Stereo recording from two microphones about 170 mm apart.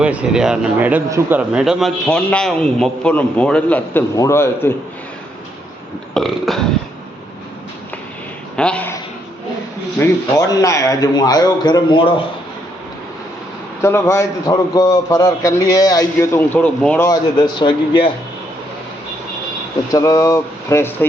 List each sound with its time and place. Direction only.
0.0 s speech: 5° right (ahead or behind); by 4.7 s 15° left (ahead or behind)
6.1 s speech: centre (ahead or behind)
8.5 s a man's voice: 5° left (ahead or behind)
10.0 s a man's voice: 20° left (ahead or behind)
13.8 s a man's voice: 15° left (ahead or behind)
17.1 s a man's voice: 25° left (ahead or behind)
19.9 s speech: 20° left (ahead or behind)